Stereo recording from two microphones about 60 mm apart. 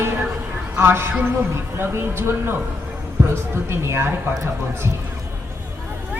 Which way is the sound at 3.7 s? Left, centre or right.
Right.